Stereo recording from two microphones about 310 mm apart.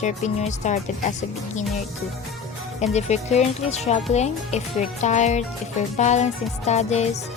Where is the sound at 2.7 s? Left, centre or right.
Left.